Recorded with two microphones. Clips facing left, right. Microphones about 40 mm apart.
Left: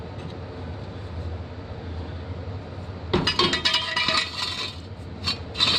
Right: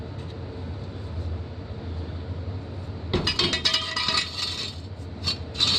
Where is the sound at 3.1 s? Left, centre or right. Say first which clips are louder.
Left 3 dB; centre.